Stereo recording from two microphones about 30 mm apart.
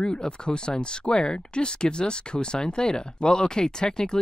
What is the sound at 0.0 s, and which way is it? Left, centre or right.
Speech, left.